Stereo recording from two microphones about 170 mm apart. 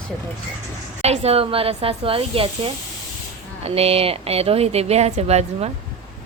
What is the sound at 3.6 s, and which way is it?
A woman's voice, 35° right (ahead or behind).